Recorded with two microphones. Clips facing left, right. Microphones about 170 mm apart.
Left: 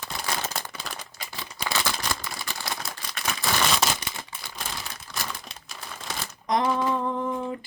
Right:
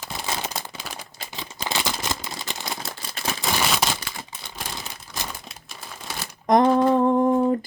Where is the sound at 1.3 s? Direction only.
20° right (ahead or behind).